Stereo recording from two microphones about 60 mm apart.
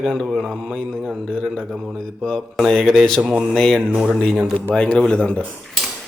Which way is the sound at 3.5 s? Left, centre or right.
Centre.